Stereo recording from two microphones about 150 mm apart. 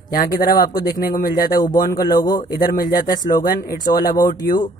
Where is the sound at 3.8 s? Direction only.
25° left (ahead or behind).